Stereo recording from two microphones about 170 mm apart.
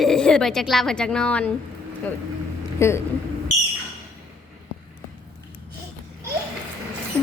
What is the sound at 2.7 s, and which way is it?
Speech, 15° left (ahead or behind).